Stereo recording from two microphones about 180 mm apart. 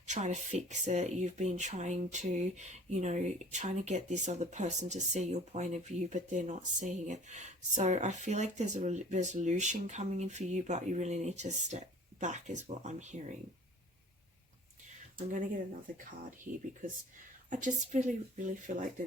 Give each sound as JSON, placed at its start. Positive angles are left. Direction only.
{"t": 0.1, "sound": "speech", "side_deg": -40}
{"t": 14.8, "sound": "a sound", "side_deg": -45}
{"t": 17.5, "sound": "speech", "side_deg": -45}